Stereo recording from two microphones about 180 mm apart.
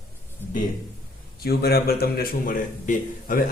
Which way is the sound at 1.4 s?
60° left (ahead or behind).